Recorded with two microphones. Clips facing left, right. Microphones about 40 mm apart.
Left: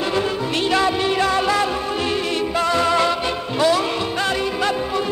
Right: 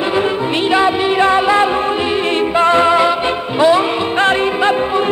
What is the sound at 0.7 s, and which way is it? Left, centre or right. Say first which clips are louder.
Music: right 5 dB; right.